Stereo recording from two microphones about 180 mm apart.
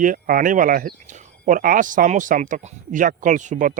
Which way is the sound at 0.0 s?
50° right (ahead or behind).